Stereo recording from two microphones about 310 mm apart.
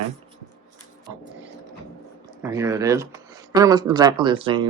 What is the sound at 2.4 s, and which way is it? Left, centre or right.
Speech, centre.